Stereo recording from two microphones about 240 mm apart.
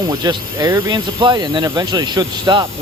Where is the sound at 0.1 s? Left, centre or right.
Centre.